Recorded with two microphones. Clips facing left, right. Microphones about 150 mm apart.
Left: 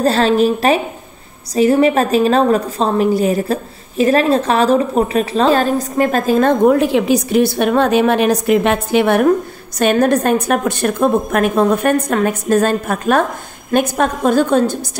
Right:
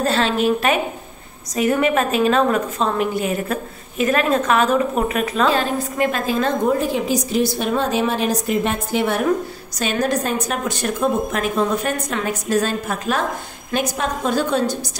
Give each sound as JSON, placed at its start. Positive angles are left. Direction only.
{"t": 0.0, "sound": "a woman's voice", "side_deg": 40}